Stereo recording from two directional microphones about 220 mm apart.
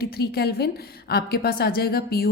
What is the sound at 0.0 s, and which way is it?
A woman's voice, 45° left (ahead or behind).